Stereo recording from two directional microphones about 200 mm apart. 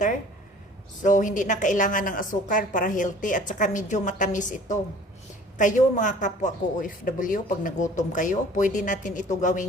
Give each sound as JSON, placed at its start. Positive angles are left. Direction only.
{"t": 1.0, "sound": "speech", "side_deg": 40}